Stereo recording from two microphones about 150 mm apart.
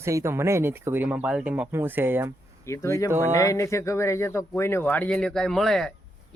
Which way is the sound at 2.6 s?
20° left (ahead or behind).